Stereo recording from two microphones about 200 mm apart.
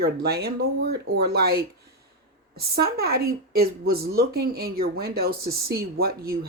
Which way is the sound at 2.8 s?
50° right (ahead or behind).